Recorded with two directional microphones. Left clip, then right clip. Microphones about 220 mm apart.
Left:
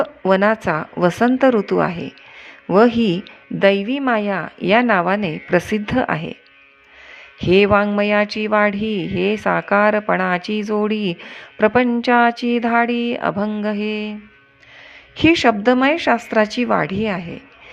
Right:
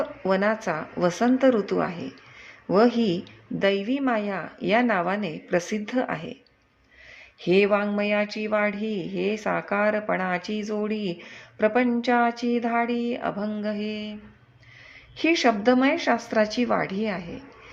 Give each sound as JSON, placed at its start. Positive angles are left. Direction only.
{"t": 0.0, "sound": "speech", "side_deg": 20}
{"t": 7.4, "sound": "speech", "side_deg": 20}
{"t": 15.2, "sound": "speech", "side_deg": 20}